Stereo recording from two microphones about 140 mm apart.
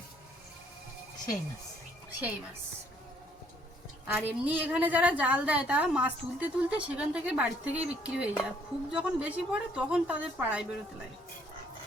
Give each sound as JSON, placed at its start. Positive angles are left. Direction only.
{"t": 4.0, "sound": "a woman's voice", "side_deg": -10}